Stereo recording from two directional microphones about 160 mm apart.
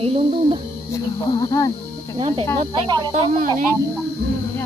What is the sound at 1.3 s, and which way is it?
Speech, 25° left (ahead or behind).